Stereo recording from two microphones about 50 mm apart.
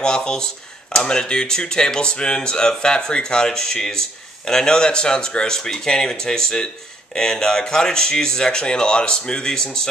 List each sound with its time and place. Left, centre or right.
0.0 s speech: centre